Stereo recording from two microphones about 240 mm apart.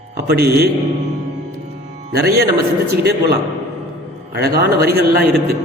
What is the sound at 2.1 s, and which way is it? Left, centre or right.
Speech, right.